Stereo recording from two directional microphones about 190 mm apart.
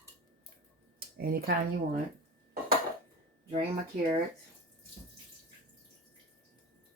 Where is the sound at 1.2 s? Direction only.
55° right (ahead or behind).